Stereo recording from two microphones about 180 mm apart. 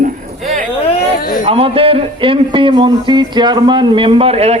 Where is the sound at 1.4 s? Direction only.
30° right (ahead or behind).